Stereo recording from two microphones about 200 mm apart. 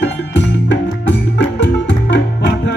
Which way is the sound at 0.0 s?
65° left (ahead or behind).